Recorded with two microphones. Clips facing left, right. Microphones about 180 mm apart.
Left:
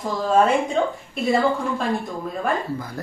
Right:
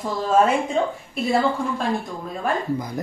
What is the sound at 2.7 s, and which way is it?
Speech, 15° right (ahead or behind).